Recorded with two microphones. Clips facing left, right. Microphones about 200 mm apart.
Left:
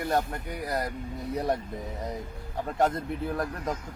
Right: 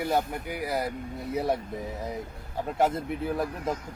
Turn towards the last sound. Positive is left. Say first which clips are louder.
# right 2 dB
turn(degrees=-5)  # may be behind; listen again after turning